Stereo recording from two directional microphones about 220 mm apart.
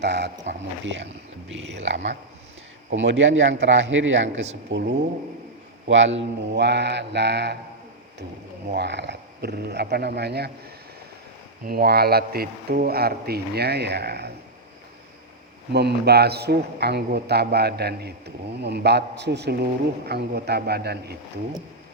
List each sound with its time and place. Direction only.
0.0 s speech: 50° right (ahead or behind)
5.9 s speech: 55° right (ahead or behind)
8.7 s speech: 50° right (ahead or behind)
11.6 s speech: 45° right (ahead or behind)
15.7 s speech: 50° right (ahead or behind)